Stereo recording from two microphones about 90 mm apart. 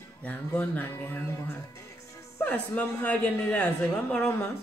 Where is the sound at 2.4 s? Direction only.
15° left (ahead or behind).